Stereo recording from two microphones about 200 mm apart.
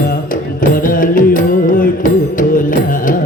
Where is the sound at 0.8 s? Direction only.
45° left (ahead or behind).